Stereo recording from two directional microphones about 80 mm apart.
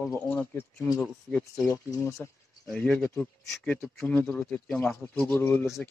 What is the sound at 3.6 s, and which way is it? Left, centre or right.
Speech, centre.